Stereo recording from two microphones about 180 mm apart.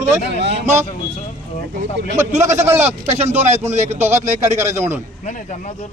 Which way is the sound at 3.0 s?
35° right (ahead or behind).